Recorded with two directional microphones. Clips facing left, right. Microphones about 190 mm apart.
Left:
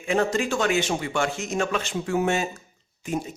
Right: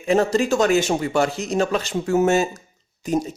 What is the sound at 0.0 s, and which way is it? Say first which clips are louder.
Speech: right 5 dB; 35° right (ahead or behind).